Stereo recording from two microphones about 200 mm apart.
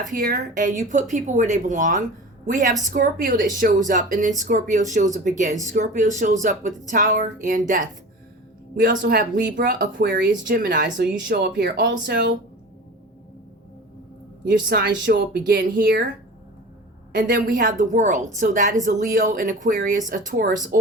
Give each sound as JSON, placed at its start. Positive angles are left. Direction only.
{"t": 0.0, "sound": "speech", "side_deg": -45}
{"t": 8.9, "sound": "speech", "side_deg": -50}
{"t": 10.8, "sound": "speech", "side_deg": -60}
{"t": 14.7, "sound": "speech", "side_deg": -55}
{"t": 17.2, "sound": "speech", "side_deg": -45}